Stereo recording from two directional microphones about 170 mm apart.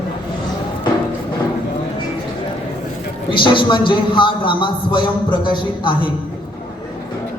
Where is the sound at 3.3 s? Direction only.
30° left (ahead or behind).